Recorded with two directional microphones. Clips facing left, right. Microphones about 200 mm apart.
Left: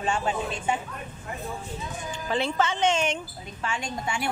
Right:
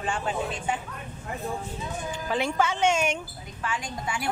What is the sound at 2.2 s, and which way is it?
Speech, 10° right (ahead or behind).